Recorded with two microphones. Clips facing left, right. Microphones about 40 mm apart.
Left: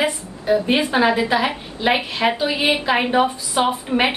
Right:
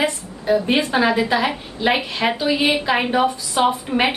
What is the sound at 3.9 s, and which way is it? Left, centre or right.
Speech, centre.